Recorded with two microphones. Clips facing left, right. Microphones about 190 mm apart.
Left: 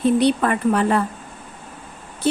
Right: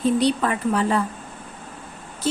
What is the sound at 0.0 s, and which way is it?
A woman's voice, 60° left (ahead or behind).